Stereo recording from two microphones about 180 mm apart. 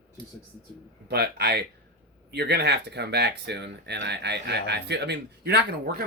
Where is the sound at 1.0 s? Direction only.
65° right (ahead or behind).